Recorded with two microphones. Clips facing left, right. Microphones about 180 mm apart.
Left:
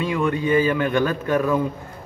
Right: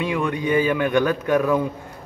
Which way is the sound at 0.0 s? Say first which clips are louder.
Left 1 dB; 15° right (ahead or behind).